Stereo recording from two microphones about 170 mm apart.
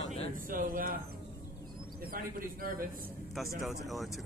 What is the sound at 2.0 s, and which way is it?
Speech, 60° right (ahead or behind).